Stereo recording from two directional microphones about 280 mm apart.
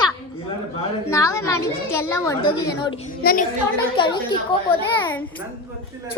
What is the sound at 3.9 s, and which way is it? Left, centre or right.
Speech, centre.